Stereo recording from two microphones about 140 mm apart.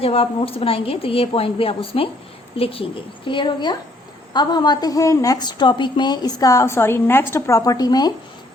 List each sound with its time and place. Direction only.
0.0 s a woman's voice: 40° left (ahead or behind)